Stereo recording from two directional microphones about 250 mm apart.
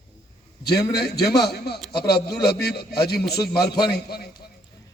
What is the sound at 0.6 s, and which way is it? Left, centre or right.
A man's voice, left.